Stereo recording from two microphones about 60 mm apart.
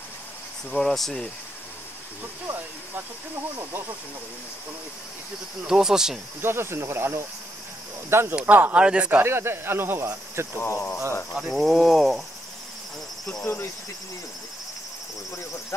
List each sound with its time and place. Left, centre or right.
0.7 s speech: centre
5.7 s speech: centre
6.4 s speech: right
8.5 s speech: right
8.7 s speech: centre
9.2 s speech: right
10.6 s speech: left
11.4 s speech: centre
13.4 s speech: left